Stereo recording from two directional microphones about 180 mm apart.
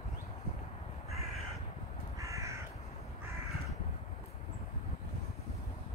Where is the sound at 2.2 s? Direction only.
15° right (ahead or behind).